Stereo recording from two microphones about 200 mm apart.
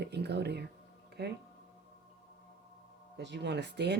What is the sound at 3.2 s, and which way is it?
Speech, 60° right (ahead or behind).